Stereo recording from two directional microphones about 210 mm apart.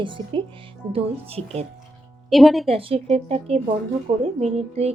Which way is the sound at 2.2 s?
Centre (ahead or behind).